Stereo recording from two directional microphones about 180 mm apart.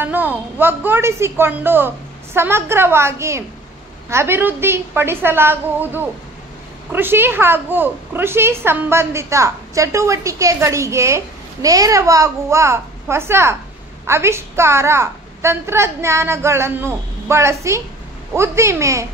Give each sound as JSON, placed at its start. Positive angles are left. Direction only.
{"t": 0.0, "sound": "a woman's voice", "side_deg": -10}